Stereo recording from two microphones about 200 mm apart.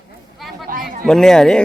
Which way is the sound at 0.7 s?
40° right (ahead or behind).